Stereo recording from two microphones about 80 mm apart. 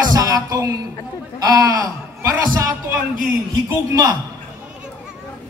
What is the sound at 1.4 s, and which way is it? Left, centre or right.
Speech, right.